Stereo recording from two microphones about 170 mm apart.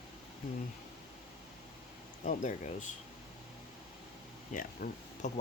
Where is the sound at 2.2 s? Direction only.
50° left (ahead or behind).